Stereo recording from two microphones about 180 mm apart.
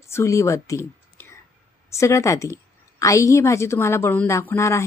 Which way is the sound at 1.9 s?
15° left (ahead or behind).